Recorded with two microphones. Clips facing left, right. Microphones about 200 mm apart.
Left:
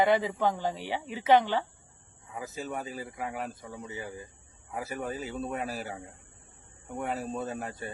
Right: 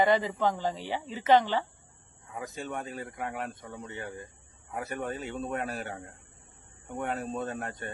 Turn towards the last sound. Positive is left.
turn(degrees=5)  # may be behind; listen again after turning